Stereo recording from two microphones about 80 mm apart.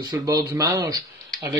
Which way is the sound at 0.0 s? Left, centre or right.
Right.